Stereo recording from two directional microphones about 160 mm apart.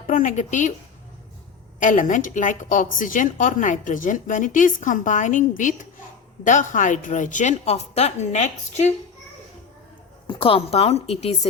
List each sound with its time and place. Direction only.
0.1 s a woman's voice: 55° left (ahead or behind)
1.8 s a woman's voice: 55° left (ahead or behind)
10.2 s a woman's voice: 30° left (ahead or behind)